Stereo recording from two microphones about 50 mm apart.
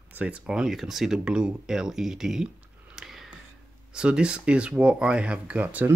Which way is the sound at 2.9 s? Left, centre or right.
Centre.